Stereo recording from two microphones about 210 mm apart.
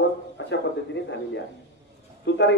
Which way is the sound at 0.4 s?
60° left (ahead or behind).